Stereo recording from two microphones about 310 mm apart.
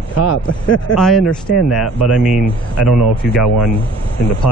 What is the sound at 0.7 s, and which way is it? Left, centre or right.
Speech, centre.